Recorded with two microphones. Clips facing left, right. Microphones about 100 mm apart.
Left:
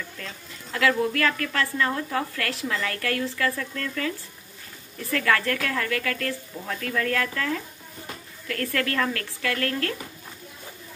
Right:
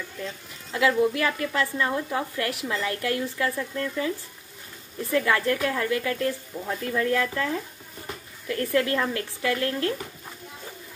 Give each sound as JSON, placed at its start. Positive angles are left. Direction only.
{"t": 0.2, "sound": "speech", "side_deg": -20}